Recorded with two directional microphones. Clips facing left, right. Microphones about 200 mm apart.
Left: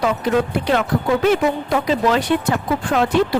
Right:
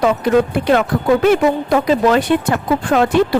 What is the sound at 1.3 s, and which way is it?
Speech, 50° right (ahead or behind).